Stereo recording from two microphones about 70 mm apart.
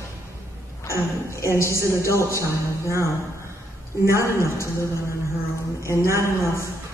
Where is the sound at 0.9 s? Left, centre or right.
Left.